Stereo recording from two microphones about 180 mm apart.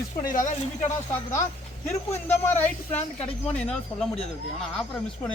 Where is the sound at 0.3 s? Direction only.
45° left (ahead or behind).